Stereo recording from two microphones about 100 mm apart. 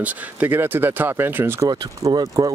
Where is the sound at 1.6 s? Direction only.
40° right (ahead or behind).